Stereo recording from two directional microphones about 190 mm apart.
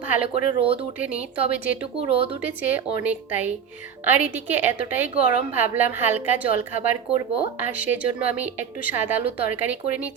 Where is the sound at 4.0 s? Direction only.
10° right (ahead or behind).